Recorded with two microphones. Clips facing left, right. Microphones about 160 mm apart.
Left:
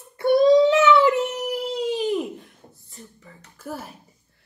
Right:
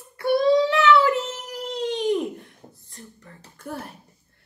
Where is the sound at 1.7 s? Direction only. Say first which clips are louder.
Right 2 dB; 5° left (ahead or behind).